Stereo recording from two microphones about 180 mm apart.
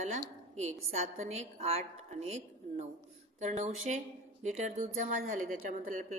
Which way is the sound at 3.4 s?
40° right (ahead or behind).